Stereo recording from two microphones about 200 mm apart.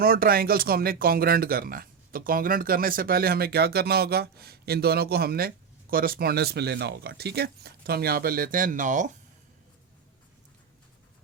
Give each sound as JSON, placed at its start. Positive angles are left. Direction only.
{"t": 0.0, "sound": "speech", "side_deg": -50}